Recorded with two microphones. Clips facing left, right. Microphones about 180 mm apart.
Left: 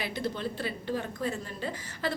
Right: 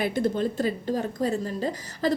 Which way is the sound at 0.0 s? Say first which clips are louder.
Right 8 dB; 50° right (ahead or behind).